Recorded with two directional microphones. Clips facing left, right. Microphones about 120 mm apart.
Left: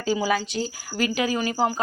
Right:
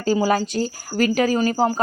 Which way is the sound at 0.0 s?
45° right (ahead or behind).